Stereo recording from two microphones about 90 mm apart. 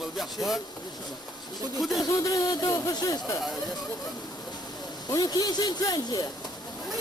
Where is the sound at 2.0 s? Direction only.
50° left (ahead or behind).